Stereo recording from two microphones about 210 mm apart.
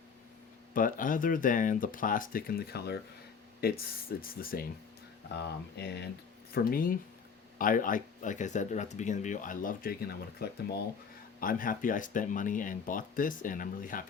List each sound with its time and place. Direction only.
0.7 s speech: 40° left (ahead or behind)